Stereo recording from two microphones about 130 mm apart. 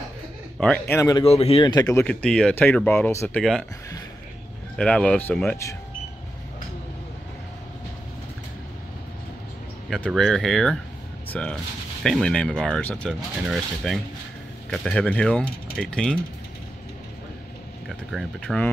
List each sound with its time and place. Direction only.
0.6 s speech: 10° left (ahead or behind)
0.9 s speech: 25° left (ahead or behind)
1.2 s speech: 50° left (ahead or behind)
1.6 s speech: 30° left (ahead or behind)
2.0 s speech: 10° left (ahead or behind)
4.7 s speech: 5° left (ahead or behind)
9.8 s speech: 5° left (ahead or behind)
17.8 s speech: centre (ahead or behind)